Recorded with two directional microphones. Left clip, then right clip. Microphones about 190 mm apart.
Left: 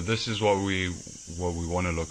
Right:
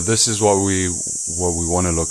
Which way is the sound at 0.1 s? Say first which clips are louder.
Right 8 dB; 55° right (ahead or behind).